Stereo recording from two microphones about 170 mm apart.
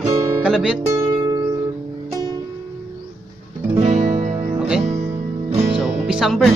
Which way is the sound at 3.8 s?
45° right (ahead or behind).